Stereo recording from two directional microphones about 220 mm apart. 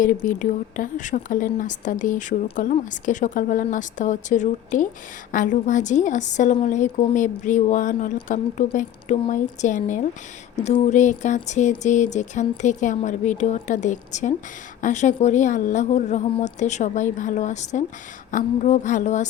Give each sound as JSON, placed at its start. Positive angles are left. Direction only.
{"t": 0.0, "sound": "a woman's voice", "side_deg": 35}